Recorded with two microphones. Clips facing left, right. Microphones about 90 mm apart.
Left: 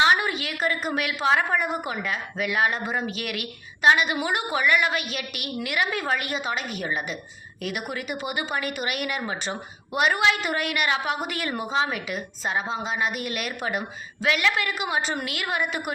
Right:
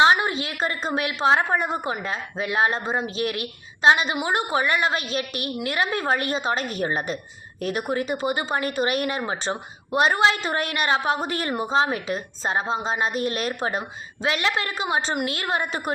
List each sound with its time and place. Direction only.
0.0 s a woman's voice: 25° right (ahead or behind)